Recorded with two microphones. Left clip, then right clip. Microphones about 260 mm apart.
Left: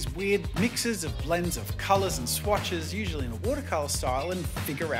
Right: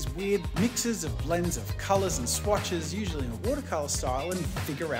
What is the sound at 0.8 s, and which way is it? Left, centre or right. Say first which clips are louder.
Speech: left 1 dB; centre.